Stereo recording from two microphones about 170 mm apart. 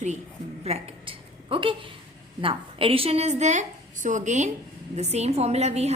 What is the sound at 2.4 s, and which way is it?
A woman's voice, 30° right (ahead or behind).